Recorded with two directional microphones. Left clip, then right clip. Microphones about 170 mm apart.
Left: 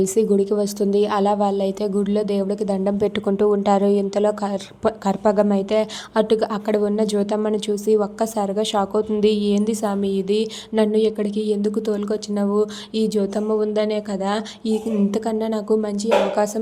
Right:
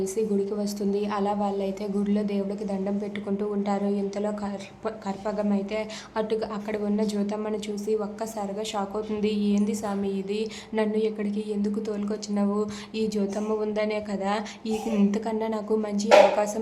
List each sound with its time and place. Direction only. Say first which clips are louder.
0.0 s a woman's voice: left 8 dB; 40° left (ahead or behind)